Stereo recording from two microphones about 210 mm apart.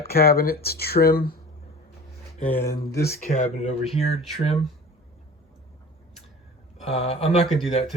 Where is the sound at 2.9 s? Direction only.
50° left (ahead or behind).